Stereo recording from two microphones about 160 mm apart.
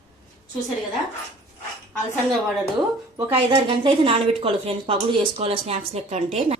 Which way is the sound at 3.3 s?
35° right (ahead or behind).